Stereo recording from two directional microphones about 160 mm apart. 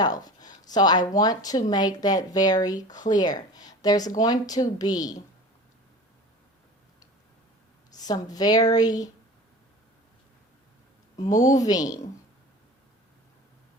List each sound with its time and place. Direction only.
0.0 s speech: 25° left (ahead or behind)
7.9 s speech: 25° left (ahead or behind)
11.5 s speech: 20° left (ahead or behind)